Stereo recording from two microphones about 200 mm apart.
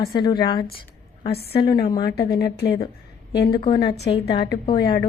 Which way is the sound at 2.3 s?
50° left (ahead or behind).